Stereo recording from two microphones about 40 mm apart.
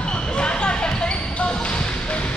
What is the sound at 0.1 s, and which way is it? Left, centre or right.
Basketball bounce, left.